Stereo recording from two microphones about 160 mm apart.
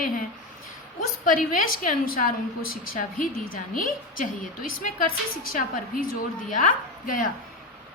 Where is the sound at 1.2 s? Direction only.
55° left (ahead or behind).